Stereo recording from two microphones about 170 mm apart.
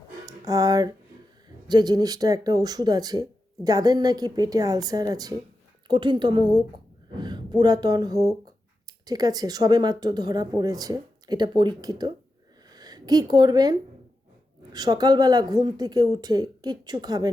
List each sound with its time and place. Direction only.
0.3 s a woman's voice: 20° right (ahead or behind)